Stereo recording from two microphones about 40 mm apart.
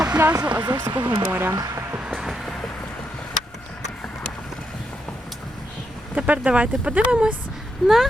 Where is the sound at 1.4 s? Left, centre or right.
Right.